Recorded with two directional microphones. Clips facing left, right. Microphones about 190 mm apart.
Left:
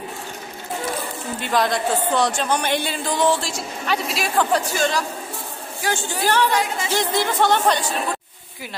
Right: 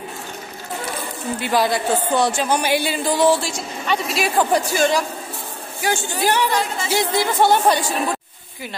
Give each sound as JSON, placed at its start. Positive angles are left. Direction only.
{"t": 1.4, "sound": "a woman's voice", "side_deg": -5}
{"t": 4.4, "sound": "speech", "side_deg": -15}
{"t": 6.5, "sound": "speech", "side_deg": 10}
{"t": 6.9, "sound": "speech", "side_deg": -10}